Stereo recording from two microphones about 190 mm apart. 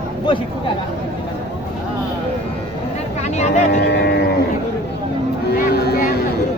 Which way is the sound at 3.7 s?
60° left (ahead or behind).